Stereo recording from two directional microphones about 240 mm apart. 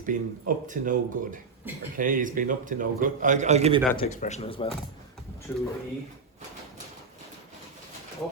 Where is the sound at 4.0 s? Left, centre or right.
Left.